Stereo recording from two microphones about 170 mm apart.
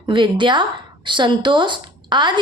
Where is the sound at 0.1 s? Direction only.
25° right (ahead or behind).